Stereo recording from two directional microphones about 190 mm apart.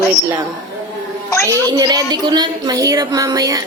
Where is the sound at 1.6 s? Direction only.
20° right (ahead or behind).